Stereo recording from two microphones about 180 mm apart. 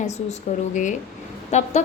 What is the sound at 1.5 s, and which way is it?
Speech, 40° left (ahead or behind).